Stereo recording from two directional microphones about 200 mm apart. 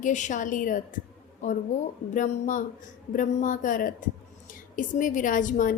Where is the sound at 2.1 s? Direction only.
40° left (ahead or behind).